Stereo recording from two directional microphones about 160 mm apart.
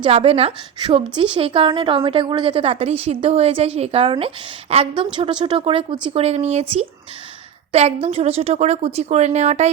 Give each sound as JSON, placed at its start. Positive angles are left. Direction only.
{"t": 0.0, "sound": "a woman's voice", "side_deg": -35}